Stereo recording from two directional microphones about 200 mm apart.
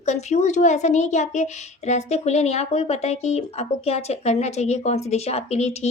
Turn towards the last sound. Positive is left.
turn(degrees=35)  # may be behind; listen again after turning